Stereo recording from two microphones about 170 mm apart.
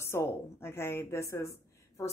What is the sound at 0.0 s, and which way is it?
A woman's voice, 15° left (ahead or behind).